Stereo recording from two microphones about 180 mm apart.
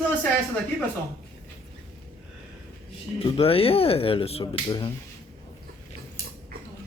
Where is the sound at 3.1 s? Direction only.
35° left (ahead or behind).